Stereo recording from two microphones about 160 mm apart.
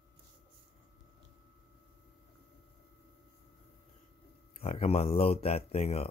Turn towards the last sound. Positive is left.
turn(degrees=40)  # may be behind; listen again after turning